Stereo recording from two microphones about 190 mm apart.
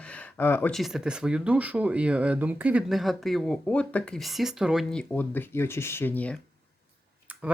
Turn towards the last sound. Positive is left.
turn(degrees=10)  # may be behind; listen again after turning